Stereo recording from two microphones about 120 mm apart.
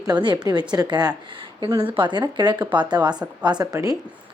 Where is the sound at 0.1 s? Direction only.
40° right (ahead or behind).